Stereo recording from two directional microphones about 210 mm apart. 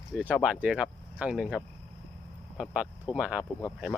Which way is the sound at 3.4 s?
15° left (ahead or behind).